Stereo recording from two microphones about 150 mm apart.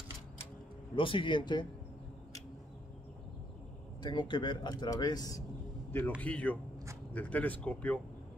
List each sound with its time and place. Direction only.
0.9 s speech: 35° left (ahead or behind)
4.0 s speech: 30° left (ahead or behind)
5.9 s speech: 15° left (ahead or behind)